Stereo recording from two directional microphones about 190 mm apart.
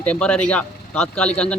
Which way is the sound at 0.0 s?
5° left (ahead or behind).